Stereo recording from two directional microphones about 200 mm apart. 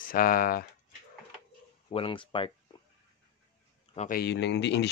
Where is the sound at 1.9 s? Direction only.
25° left (ahead or behind).